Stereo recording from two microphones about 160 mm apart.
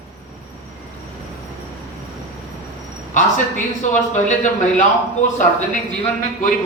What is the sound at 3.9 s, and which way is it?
Speech, 50° left (ahead or behind).